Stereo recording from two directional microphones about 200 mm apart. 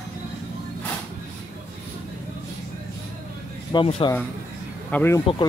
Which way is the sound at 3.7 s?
25° left (ahead or behind).